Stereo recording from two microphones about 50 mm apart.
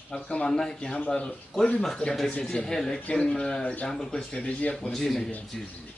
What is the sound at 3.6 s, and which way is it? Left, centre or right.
Speech, left.